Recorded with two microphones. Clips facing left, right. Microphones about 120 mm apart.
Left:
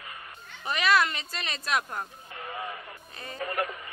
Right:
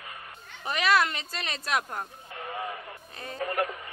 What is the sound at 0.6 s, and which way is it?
Speech, 45° right (ahead or behind).